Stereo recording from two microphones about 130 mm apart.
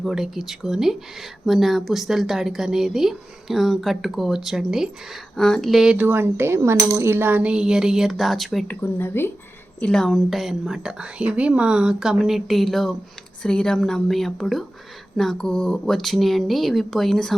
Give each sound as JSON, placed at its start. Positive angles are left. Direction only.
{"t": 0.0, "sound": "a woman's voice", "side_deg": -5}
{"t": 8.8, "sound": "speech", "side_deg": 15}
{"t": 9.8, "sound": "a woman's voice", "side_deg": 5}